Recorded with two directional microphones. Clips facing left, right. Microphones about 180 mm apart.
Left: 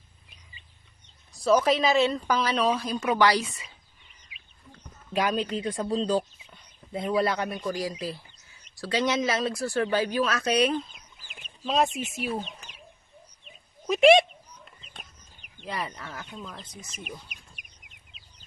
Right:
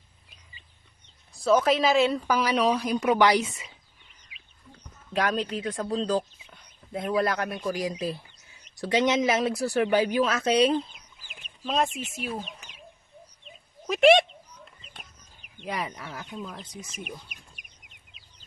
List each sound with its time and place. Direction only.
1.5 s a woman's voice: centre (ahead or behind); by 3.7 s 20° right (ahead or behind)
5.1 s speech: centre (ahead or behind)
7.7 s speech: 15° right (ahead or behind)
11.6 s speech: 5° left (ahead or behind)
13.8 s speech: centre (ahead or behind)
15.6 s a woman's voice: 15° right (ahead or behind)